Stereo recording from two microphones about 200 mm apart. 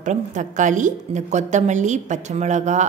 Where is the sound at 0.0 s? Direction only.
40° right (ahead or behind).